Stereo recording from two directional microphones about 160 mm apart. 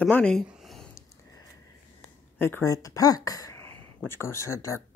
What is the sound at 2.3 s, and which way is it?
Speech, 15° left (ahead or behind).